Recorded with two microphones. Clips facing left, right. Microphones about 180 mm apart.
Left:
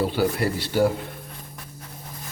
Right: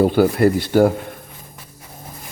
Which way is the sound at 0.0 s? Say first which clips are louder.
Right 9 dB; 50° right (ahead or behind).